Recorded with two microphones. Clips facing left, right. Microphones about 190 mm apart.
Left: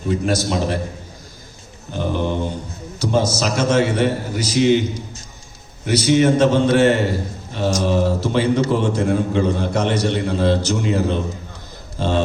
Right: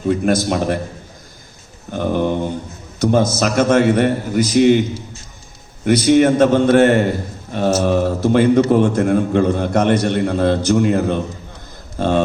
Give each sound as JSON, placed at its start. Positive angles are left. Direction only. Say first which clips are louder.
{"t": 0.3, "sound": "a man's voice", "louder": "right 2 dB", "side_deg": -55}
{"t": 1.9, "sound": "a man's voice", "louder": "right 4 dB", "side_deg": -50}
{"t": 5.8, "sound": "a man's voice", "louder": "right 3 dB", "side_deg": -55}